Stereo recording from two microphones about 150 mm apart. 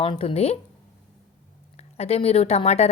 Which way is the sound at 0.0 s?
35° left (ahead or behind).